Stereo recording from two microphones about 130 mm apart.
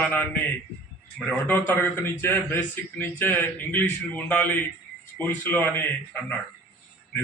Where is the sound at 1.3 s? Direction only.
15° left (ahead or behind).